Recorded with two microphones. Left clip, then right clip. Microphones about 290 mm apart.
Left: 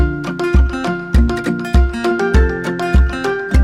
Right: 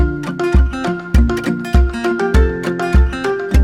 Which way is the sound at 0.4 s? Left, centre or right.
Centre.